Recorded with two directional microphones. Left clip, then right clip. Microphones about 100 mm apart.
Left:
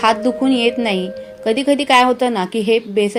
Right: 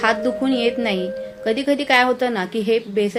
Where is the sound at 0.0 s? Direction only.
35° left (ahead or behind).